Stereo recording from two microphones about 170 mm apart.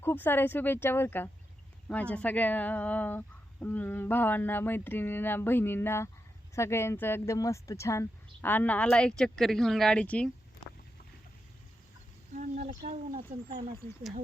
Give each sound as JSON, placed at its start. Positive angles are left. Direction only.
{"t": 0.0, "sound": "speech", "side_deg": 10}
{"t": 12.3, "sound": "speech", "side_deg": -50}